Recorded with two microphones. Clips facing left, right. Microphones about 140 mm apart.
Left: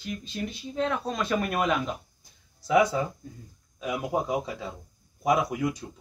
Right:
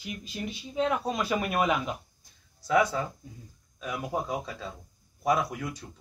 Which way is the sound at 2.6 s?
15° left (ahead or behind).